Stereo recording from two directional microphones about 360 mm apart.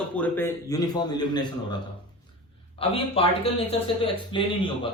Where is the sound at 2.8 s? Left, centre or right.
Centre.